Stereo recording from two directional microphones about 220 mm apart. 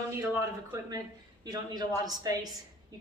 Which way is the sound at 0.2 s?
15° right (ahead or behind).